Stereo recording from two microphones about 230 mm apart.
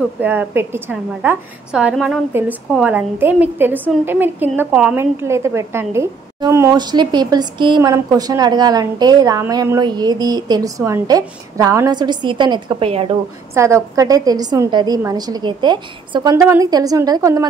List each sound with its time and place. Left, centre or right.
0.2 s a woman's voice: centre; by 13.2 s right
13.6 s a woman's voice: centre